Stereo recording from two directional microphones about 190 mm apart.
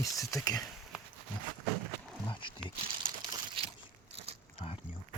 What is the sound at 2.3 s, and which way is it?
Speech, 25° left (ahead or behind).